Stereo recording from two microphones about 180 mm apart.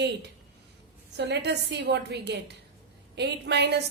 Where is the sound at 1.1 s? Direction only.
70° right (ahead or behind).